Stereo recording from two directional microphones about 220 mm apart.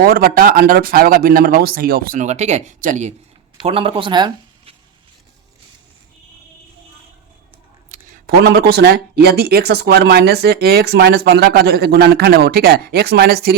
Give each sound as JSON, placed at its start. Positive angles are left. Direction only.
{"t": 0.0, "sound": "speech", "side_deg": -40}
{"t": 7.9, "sound": "speech", "side_deg": -40}